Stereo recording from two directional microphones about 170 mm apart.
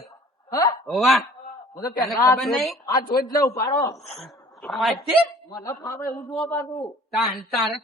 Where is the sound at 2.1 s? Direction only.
20° left (ahead or behind).